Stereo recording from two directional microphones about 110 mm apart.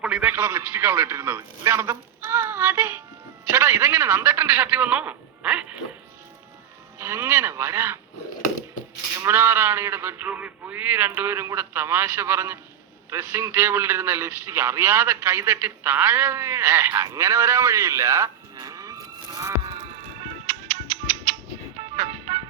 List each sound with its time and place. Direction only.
0.0 s a man's voice: 10° right (ahead or behind)
0.3 s a man's voice: 20° right (ahead or behind)
7.0 s a man's voice: 25° right (ahead or behind)
9.1 s a man's voice: 20° right (ahead or behind)
19.6 s music: 50° right (ahead or behind)